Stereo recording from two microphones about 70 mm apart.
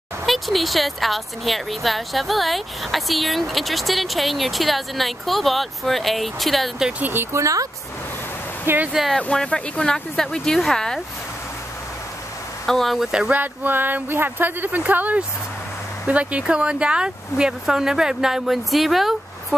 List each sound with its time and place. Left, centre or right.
0.3 s speech: centre
7.0 s speech: right
7.3 s speech: right
8.6 s speech: right
9.2 s speech: centre
12.6 s speech: centre
13.3 s speech: right; by 19.1 s centre